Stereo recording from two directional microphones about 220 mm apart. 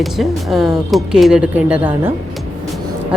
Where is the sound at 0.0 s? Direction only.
Centre (ahead or behind).